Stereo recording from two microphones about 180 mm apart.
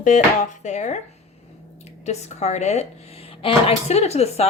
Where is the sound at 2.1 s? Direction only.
40° left (ahead or behind).